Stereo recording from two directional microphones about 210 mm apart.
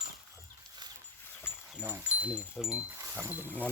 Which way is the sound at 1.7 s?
5° right (ahead or behind).